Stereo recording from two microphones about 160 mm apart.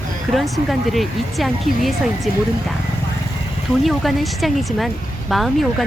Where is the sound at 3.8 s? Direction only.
Centre (ahead or behind).